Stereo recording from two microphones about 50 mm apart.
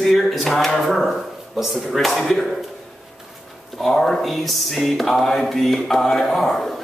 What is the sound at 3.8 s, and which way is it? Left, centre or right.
Speech, centre.